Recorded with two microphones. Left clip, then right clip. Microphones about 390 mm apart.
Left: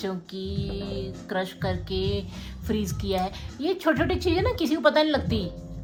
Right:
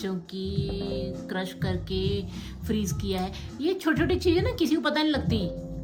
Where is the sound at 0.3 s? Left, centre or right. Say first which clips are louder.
Even; centre.